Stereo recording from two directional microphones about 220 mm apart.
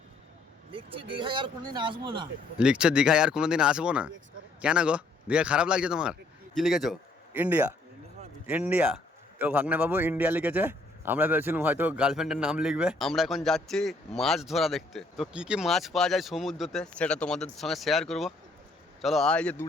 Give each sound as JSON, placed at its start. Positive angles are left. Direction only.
{"t": 0.7, "sound": "speech", "side_deg": -25}
{"t": 2.6, "sound": "a man's voice", "side_deg": -5}